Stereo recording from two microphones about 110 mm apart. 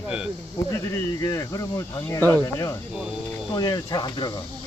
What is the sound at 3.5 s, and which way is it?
Speech, 35° left (ahead or behind).